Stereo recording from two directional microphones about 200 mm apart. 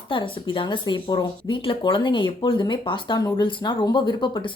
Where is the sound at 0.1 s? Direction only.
25° left (ahead or behind).